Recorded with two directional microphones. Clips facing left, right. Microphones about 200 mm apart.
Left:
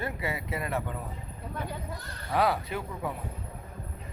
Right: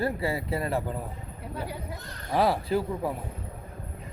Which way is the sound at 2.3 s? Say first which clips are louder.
Right 3 dB; 30° right (ahead or behind).